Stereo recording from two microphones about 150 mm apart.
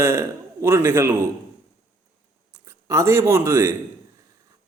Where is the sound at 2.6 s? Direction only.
20° right (ahead or behind).